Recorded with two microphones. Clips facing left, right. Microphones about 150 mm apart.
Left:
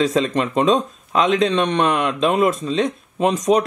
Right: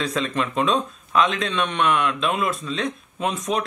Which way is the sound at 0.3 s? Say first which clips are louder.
Left 5 dB; 35° left (ahead or behind).